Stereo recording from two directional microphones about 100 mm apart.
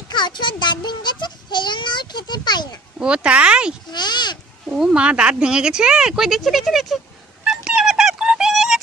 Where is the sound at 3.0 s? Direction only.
10° right (ahead or behind).